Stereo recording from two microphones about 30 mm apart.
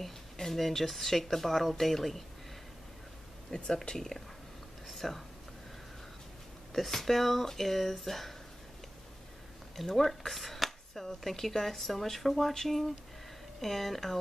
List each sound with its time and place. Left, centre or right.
0.4 s speech: centre
3.4 s speech: centre
3.9 s speech: centre
4.8 s a sound: centre
6.7 s speech: centre
9.8 s speech: centre